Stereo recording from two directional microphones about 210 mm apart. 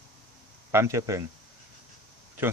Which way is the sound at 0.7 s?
15° right (ahead or behind).